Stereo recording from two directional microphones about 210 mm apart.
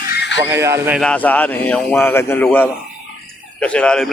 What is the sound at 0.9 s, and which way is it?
Speech, 5° left (ahead or behind).